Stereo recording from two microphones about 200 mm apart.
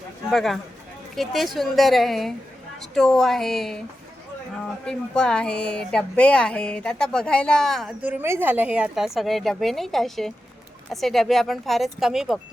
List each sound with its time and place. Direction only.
0.3 s speech: centre (ahead or behind)
4.9 s speech: 5° left (ahead or behind)